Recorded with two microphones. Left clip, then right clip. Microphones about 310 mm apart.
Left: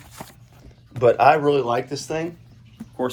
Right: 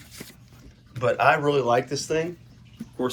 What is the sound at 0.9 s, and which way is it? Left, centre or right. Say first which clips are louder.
Speech: left 5 dB; left.